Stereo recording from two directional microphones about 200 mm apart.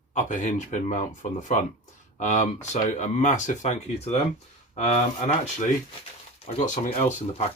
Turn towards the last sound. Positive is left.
turn(degrees=35)  # may be behind; listen again after turning